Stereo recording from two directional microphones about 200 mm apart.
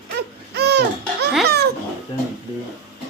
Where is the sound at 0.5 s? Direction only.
55° right (ahead or behind).